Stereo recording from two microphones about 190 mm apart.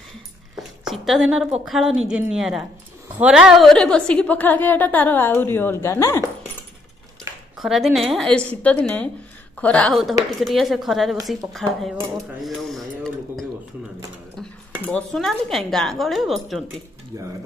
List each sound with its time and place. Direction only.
0.6 s a sound: centre (ahead or behind)
1.7 s a woman's voice: 5° right (ahead or behind); by 6.2 s 15° left (ahead or behind)
7.5 s a woman's voice: centre (ahead or behind)
14.9 s a woman's voice: 5° left (ahead or behind)
17.1 s speech: 15° right (ahead or behind)